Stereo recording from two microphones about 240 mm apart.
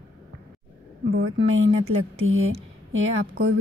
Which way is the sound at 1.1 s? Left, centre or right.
Right.